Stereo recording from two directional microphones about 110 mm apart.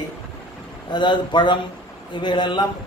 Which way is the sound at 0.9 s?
45° left (ahead or behind).